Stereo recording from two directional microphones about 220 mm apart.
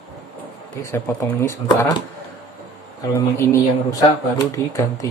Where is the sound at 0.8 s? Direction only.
10° left (ahead or behind).